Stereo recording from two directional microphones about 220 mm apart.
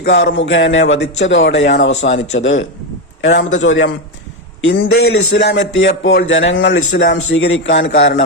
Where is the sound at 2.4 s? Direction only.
60° left (ahead or behind).